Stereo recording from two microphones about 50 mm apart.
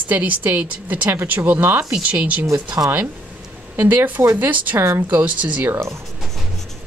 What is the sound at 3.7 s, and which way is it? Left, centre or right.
A woman's voice, right.